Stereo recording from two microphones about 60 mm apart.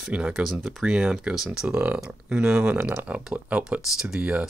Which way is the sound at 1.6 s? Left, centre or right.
Right.